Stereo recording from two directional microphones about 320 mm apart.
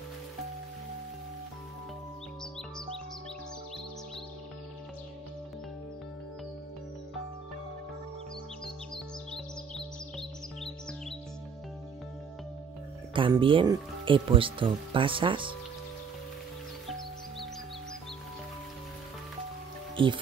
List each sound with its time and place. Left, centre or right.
8.6 s music: centre
13.1 s speech: centre
20.0 s speech: centre